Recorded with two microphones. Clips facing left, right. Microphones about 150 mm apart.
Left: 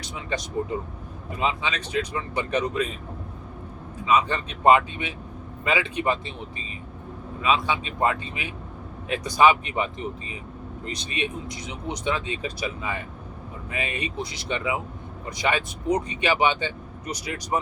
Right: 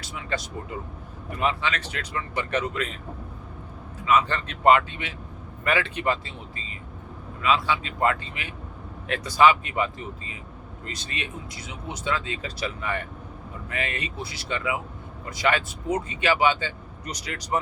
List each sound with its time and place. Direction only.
1.4 s speech: 15° left (ahead or behind)
4.0 s speech: 15° left (ahead or behind)
7.4 s speech: 20° left (ahead or behind)